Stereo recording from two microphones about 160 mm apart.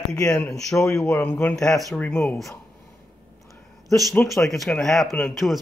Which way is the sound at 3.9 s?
Centre (ahead or behind).